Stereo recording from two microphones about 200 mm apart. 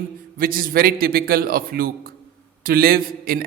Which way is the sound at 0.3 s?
45° right (ahead or behind).